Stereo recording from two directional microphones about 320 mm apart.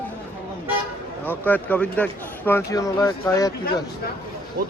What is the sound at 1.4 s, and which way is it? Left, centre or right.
Speech, centre.